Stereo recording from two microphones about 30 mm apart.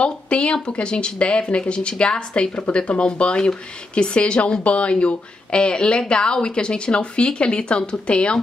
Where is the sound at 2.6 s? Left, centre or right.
Left.